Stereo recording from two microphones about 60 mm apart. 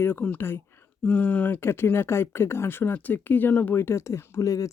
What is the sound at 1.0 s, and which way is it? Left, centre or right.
Speech, left.